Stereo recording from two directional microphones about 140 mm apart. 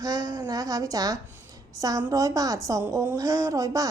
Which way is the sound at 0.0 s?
25° right (ahead or behind).